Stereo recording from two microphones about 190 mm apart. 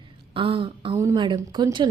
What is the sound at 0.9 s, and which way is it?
Speech, 15° right (ahead or behind).